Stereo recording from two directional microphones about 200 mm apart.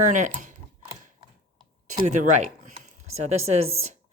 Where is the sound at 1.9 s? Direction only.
40° right (ahead or behind).